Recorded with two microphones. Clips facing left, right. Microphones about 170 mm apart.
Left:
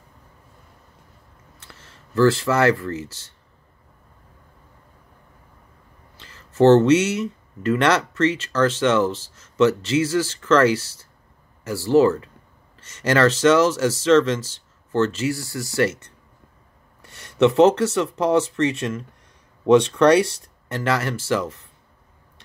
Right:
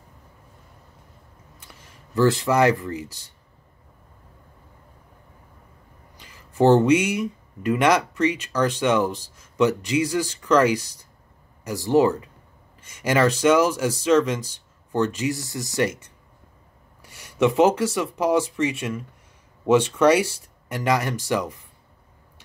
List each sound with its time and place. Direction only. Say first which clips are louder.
1.6 s speech: left 1 dB; 15° right (ahead or behind)
6.1 s speech: left 3 dB; 15° right (ahead or behind)